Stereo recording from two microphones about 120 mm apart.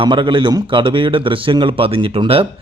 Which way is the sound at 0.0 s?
45° right (ahead or behind).